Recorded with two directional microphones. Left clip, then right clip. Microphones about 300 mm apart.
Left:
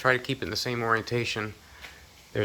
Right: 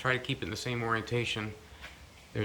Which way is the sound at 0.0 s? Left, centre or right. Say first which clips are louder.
Left 6 dB; centre.